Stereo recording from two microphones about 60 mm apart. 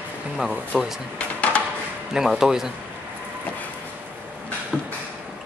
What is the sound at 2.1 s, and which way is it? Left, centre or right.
Speech, centre.